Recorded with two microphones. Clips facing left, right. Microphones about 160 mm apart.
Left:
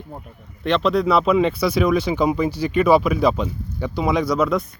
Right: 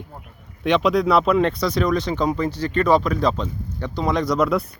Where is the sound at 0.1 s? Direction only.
20° left (ahead or behind).